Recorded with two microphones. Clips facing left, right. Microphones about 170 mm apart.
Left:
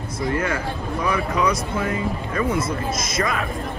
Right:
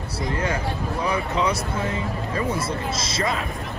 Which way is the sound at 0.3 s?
30° right (ahead or behind).